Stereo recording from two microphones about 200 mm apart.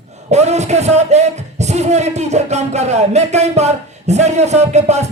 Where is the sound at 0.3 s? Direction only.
35° right (ahead or behind).